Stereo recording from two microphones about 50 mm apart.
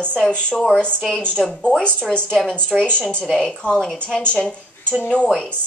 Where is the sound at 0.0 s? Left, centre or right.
Left.